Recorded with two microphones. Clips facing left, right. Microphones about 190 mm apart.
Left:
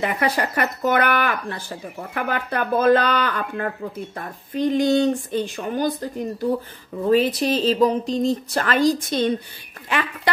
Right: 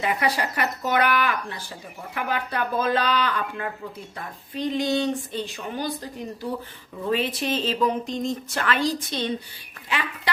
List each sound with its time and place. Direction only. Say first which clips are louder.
0.0 s speech: left 2 dB; 55° left (ahead or behind)
7.1 s speech: left 7 dB; 40° left (ahead or behind)